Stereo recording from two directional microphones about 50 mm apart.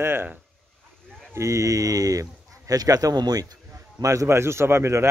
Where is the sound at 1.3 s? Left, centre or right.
Right.